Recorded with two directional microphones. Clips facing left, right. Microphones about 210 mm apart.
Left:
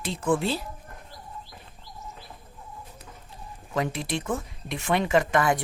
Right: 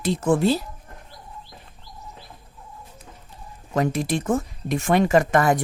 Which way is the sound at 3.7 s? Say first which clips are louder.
Right 6 dB; 45° right (ahead or behind).